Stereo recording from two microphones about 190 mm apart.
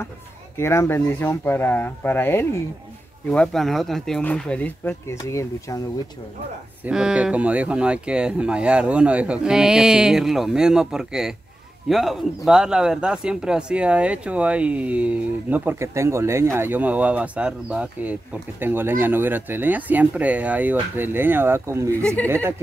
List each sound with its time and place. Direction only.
0.6 s speech: 15° left (ahead or behind)
6.8 s speech: 5° right (ahead or behind)
22.0 s speech: 5° left (ahead or behind)